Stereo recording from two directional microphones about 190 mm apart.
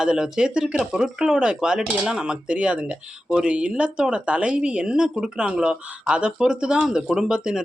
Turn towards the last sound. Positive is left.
turn(degrees=-5)  # may be behind; listen again after turning